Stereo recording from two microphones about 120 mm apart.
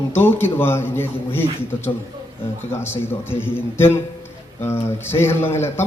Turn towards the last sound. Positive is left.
turn(degrees=20)  # may be behind; listen again after turning